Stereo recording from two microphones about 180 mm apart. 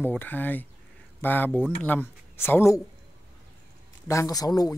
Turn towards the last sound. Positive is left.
turn(degrees=20)  # may be behind; listen again after turning